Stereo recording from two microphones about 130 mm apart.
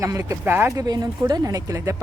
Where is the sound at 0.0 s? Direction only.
25° right (ahead or behind).